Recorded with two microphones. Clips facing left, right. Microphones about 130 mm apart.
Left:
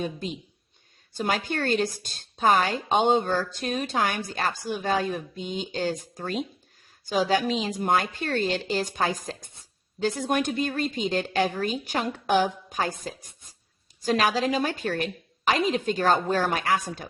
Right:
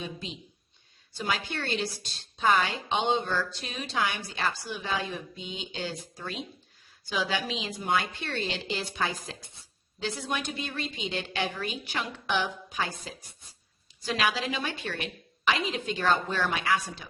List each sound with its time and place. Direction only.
0.0 s a woman's voice: 45° left (ahead or behind)